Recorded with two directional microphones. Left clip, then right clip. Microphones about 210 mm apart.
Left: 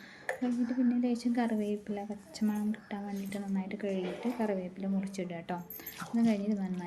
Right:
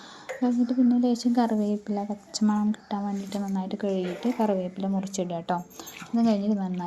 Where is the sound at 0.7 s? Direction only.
30° right (ahead or behind).